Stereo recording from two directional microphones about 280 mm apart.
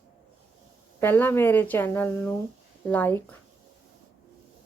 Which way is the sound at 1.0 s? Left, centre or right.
Centre.